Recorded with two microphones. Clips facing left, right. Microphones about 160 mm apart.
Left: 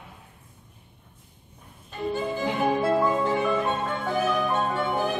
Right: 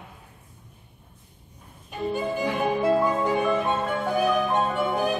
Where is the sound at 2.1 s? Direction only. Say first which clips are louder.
Right 1 dB; 15° right (ahead or behind).